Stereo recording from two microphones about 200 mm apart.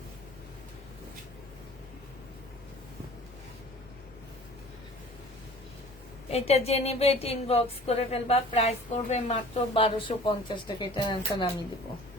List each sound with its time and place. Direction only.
6.3 s a woman's voice: 30° left (ahead or behind)